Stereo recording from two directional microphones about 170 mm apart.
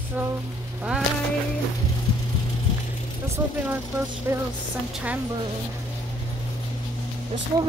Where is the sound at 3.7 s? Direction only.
10° right (ahead or behind).